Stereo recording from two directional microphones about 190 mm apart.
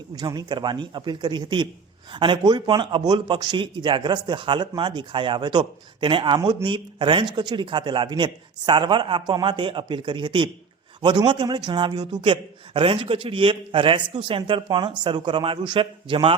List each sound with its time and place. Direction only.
0.2 s a man's voice: 20° right (ahead or behind)